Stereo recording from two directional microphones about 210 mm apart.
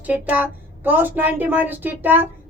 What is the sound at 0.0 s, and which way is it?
A woman's voice, 10° right (ahead or behind).